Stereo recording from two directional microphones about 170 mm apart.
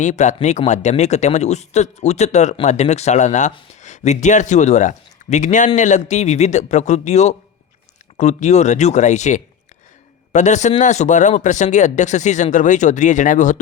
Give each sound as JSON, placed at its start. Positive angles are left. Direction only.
{"t": 0.0, "sound": "speech", "side_deg": 45}